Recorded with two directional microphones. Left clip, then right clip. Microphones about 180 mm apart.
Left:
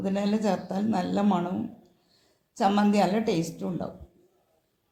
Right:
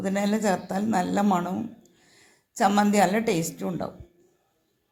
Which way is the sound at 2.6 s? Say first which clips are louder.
Right 3 dB; 20° right (ahead or behind).